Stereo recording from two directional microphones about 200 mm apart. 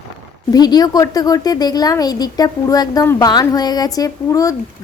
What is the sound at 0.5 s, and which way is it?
Speech, 20° left (ahead or behind).